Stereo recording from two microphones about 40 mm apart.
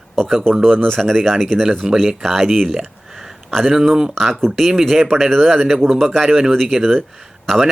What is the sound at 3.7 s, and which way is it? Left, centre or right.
Speech, centre.